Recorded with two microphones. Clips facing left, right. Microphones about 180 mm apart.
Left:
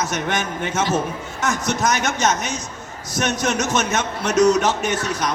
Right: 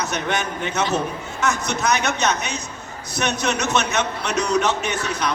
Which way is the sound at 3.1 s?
45° left (ahead or behind).